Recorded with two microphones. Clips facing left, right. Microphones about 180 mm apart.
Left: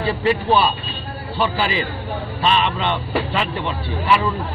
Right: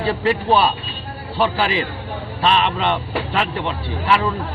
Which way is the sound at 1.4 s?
Centre (ahead or behind).